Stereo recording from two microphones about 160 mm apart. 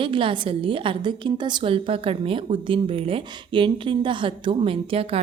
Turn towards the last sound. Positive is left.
turn(degrees=-35)  # may be behind; listen again after turning